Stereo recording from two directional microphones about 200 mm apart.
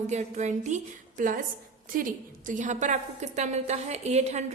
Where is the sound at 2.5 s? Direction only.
40° right (ahead or behind).